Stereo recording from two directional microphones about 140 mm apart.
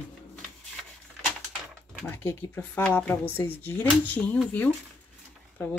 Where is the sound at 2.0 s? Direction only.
10° left (ahead or behind).